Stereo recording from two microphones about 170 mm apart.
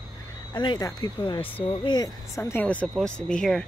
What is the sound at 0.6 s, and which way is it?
Speech, 25° left (ahead or behind).